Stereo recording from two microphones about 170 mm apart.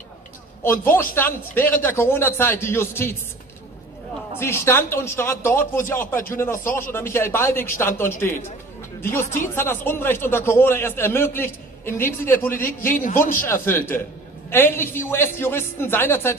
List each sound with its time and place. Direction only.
0.7 s a man's voice: 15° left (ahead or behind)
4.4 s a man's voice: 15° left (ahead or behind)
9.2 s speech: 50° left (ahead or behind)
9.6 s a man's voice: 15° left (ahead or behind)
12.9 s speech: 55° left (ahead or behind)
13.5 s a man's voice: 15° left (ahead or behind)